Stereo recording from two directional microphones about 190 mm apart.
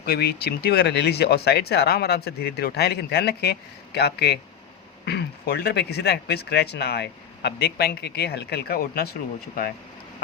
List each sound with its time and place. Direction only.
0.0 s speech: 55° left (ahead or behind)